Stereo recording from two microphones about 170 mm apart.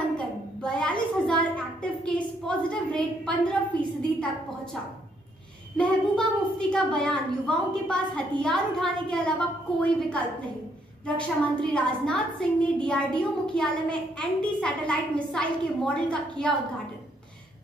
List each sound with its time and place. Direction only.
0.6 s a sound: 5° left (ahead or behind)
1.2 s a woman's voice: 5° left (ahead or behind)
5.8 s a child's voice: 5° left (ahead or behind)